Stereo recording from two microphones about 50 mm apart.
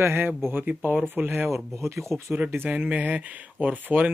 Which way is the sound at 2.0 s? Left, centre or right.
Centre.